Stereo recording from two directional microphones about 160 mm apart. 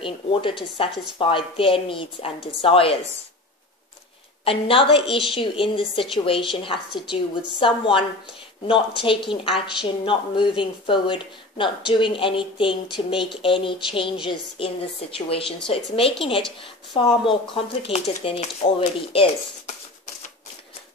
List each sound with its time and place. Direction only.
0.0 s a woman's voice: 30° left (ahead or behind)
4.5 s a woman's voice: 35° left (ahead or behind)
9.0 s a woman's voice: 30° left (ahead or behind)